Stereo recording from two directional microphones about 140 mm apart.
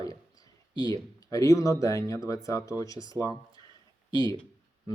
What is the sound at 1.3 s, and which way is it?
Speech, 25° left (ahead or behind).